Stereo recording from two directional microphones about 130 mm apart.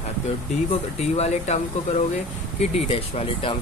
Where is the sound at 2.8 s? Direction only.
50° left (ahead or behind).